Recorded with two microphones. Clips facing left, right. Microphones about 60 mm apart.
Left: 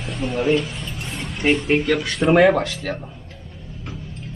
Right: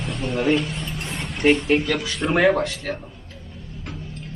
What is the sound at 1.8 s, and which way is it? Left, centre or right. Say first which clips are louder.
Speech: left 4 dB; left.